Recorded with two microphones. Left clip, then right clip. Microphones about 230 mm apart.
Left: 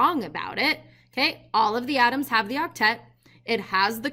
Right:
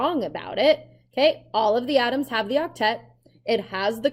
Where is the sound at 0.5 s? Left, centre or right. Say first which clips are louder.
Right 6 dB; left.